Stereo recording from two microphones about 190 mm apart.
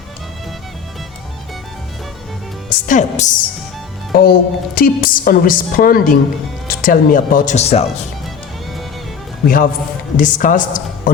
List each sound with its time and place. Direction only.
2.6 s a woman's voice: 45° left (ahead or behind)
4.1 s a woman's voice: 50° left (ahead or behind); by 7.9 s 35° left (ahead or behind)
10.2 s a woman's voice: 45° left (ahead or behind)